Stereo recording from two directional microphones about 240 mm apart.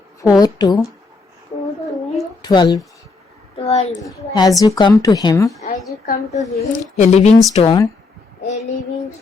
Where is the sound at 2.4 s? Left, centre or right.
Centre.